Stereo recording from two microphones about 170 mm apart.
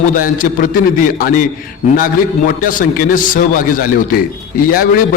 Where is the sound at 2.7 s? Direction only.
55° left (ahead or behind).